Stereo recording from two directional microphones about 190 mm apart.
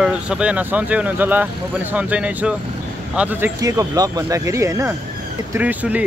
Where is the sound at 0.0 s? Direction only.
5° right (ahead or behind).